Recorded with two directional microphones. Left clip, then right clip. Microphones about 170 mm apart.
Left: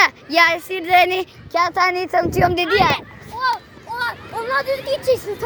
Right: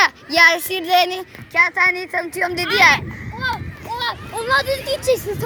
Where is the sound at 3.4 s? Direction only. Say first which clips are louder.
Left 3 dB; 55° right (ahead or behind).